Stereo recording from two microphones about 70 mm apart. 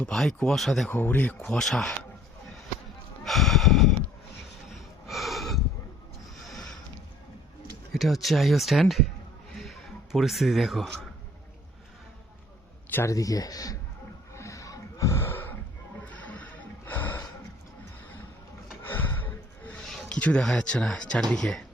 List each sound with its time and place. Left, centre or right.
0.0 s speech: centre
0.9 s speech: left; by 1.9 s centre
3.2 s snort: centre
5.0 s snort: centre
6.4 s a sound: centre
7.9 s speech: centre
9.6 s a sound: centre
13.1 s speech: left
14.3 s gasp: left
16.0 s music: left
18.8 s gasp: left
19.9 s a sound: centre
20.1 s a sound: centre
20.4 s speech: centre